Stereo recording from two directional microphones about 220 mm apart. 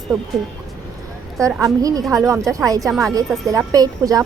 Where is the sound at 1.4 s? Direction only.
15° right (ahead or behind).